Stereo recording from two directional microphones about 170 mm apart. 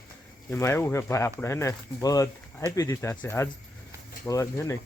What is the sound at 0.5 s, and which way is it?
Speech, 15° left (ahead or behind).